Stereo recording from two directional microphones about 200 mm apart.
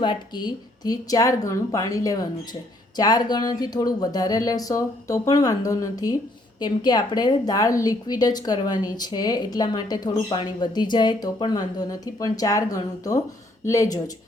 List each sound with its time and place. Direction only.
0.0 s a woman's voice: 20° left (ahead or behind)